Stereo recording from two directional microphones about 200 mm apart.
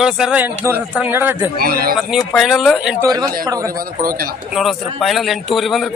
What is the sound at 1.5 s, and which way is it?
Speech, 45° right (ahead or behind).